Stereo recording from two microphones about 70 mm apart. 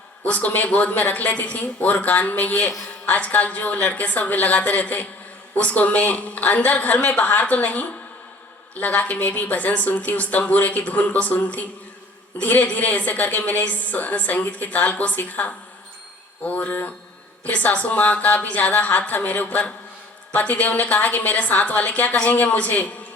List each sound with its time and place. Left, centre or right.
0.3 s a woman's voice: left